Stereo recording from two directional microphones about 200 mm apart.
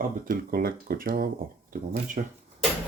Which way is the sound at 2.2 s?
35° right (ahead or behind).